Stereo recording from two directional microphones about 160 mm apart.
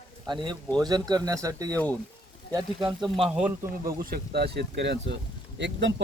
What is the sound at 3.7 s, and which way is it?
Speech, 65° right (ahead or behind).